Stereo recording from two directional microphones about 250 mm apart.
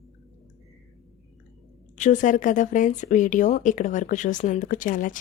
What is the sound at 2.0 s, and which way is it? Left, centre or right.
Speech, left.